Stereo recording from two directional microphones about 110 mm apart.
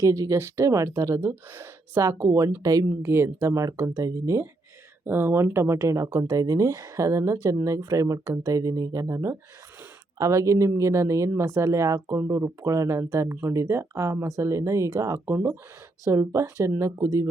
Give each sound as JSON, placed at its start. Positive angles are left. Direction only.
{"t": 0.0, "sound": "speech", "side_deg": -30}